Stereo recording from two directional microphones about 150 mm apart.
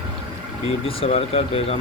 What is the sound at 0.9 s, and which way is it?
Speech, 40° left (ahead or behind).